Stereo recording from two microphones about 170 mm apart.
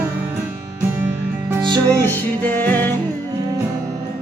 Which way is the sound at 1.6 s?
25° right (ahead or behind).